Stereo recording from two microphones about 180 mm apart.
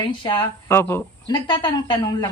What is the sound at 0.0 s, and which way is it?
Speech, 25° left (ahead or behind).